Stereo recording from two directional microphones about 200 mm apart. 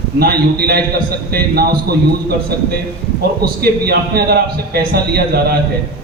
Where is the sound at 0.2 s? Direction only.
50° right (ahead or behind).